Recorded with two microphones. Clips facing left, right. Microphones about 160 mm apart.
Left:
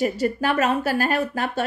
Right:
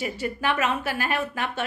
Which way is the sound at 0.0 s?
40° left (ahead or behind).